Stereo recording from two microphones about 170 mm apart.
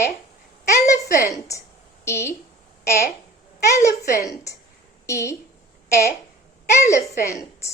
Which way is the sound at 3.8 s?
15° left (ahead or behind).